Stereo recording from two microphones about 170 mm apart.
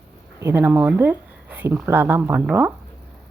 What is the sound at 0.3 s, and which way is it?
Speech, 15° right (ahead or behind).